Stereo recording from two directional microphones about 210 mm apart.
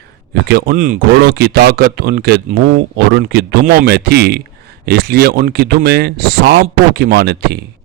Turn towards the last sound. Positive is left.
turn(degrees=-50)  # may be behind; listen again after turning